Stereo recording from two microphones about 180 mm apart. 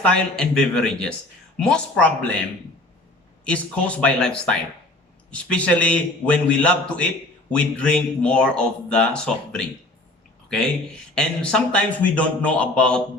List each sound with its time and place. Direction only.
0.0 s speech: 5° left (ahead or behind)
3.4 s a man's voice: 5° left (ahead or behind)
11.1 s a man's voice: 5° left (ahead or behind)